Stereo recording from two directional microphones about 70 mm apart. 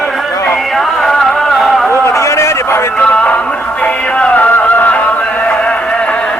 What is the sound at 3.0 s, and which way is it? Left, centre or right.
Music, centre.